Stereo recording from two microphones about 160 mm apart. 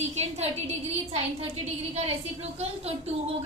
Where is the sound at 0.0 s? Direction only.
45° right (ahead or behind).